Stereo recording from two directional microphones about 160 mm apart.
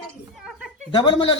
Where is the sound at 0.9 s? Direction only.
35° left (ahead or behind).